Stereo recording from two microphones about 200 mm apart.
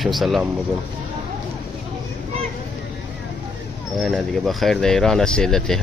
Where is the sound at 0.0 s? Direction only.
Centre (ahead or behind).